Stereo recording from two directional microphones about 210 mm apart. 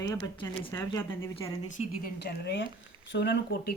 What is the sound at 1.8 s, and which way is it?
Speech, 45° left (ahead or behind).